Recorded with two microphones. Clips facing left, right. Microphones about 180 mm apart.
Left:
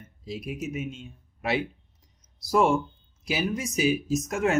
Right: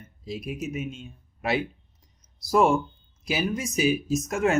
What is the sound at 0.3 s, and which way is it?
Speech, 45° right (ahead or behind).